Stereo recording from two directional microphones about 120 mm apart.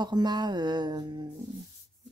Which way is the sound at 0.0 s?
35° right (ahead or behind).